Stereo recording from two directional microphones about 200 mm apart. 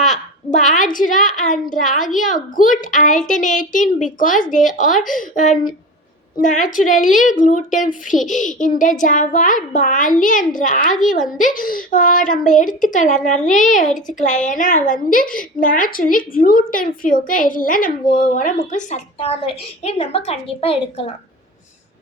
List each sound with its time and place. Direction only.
0.1 s a woman's voice: 35° left (ahead or behind)